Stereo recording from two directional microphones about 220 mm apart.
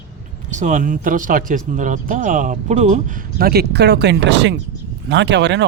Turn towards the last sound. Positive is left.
turn(degrees=-50)  # may be behind; listen again after turning